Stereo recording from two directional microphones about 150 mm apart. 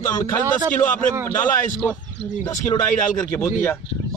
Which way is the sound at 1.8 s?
10° left (ahead or behind).